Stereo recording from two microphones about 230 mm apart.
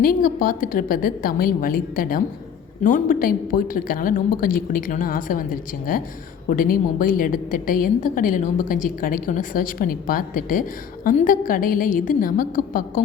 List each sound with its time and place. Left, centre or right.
0.0 s a woman's voice: left